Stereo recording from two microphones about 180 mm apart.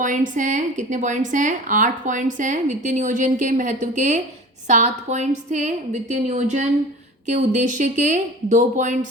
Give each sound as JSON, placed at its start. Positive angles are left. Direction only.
{"t": 0.0, "sound": "a woman's voice", "side_deg": -45}